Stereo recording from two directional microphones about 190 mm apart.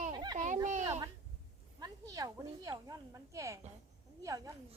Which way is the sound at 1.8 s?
20° right (ahead or behind).